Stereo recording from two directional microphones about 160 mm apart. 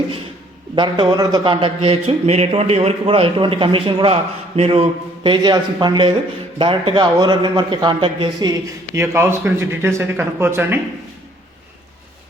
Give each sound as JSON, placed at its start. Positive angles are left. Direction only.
{"t": 0.8, "sound": "a man's voice", "side_deg": -30}
{"t": 9.0, "sound": "speech", "side_deg": -15}